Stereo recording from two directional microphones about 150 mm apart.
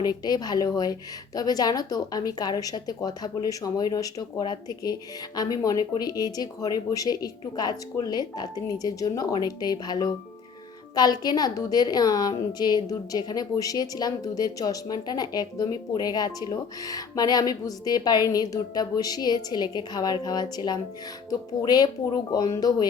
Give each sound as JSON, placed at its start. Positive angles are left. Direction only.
{"t": 0.3, "sound": "a woman's voice", "side_deg": 25}